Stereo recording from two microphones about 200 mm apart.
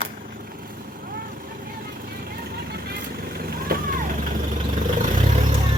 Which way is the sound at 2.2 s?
50° right (ahead or behind).